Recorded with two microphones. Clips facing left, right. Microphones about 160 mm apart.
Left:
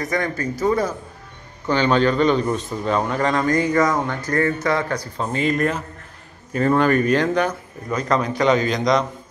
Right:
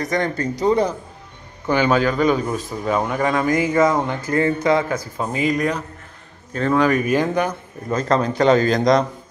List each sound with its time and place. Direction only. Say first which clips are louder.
0.2 s a man's voice: right 2 dB; 20° right (ahead or behind)
8.1 s a man's voice: right 2 dB; 30° right (ahead or behind)